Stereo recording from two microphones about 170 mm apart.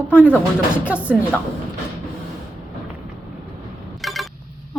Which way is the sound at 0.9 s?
10° right (ahead or behind).